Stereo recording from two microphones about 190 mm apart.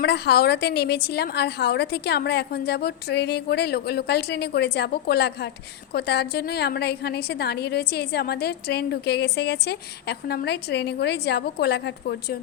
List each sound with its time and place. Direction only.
0.0 s a woman's voice: 60° left (ahead or behind)